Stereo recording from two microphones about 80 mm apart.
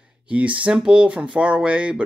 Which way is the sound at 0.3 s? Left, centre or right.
Centre.